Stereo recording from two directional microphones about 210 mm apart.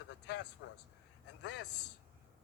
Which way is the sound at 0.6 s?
60° left (ahead or behind).